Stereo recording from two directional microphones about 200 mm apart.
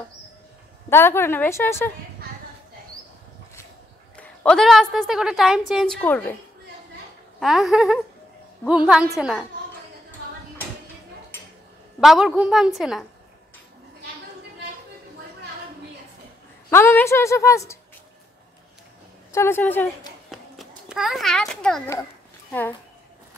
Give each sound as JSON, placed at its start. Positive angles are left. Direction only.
{"t": 0.8, "sound": "a woman's voice", "side_deg": 10}
{"t": 4.2, "sound": "a woman's voice", "side_deg": 5}
{"t": 7.3, "sound": "a woman's voice", "side_deg": 0}
{"t": 12.0, "sound": "a woman's voice", "side_deg": 0}
{"t": 16.7, "sound": "a woman's voice", "side_deg": 10}
{"t": 19.3, "sound": "a woman's voice", "side_deg": 10}
{"t": 20.2, "sound": "a sound", "side_deg": 0}
{"t": 22.5, "sound": "speech", "side_deg": 10}